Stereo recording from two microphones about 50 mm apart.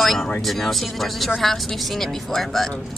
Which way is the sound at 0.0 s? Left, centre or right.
Centre.